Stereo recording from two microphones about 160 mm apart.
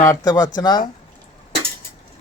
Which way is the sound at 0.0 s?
20° left (ahead or behind).